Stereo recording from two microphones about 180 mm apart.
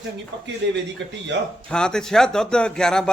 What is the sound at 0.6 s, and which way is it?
Speech, 70° right (ahead or behind).